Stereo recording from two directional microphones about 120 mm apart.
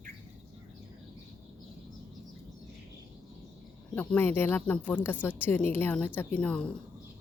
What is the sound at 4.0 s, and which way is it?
A woman's voice, 15° left (ahead or behind).